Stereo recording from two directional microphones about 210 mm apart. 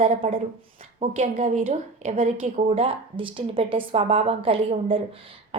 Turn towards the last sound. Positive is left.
turn(degrees=-25)  # may be behind; listen again after turning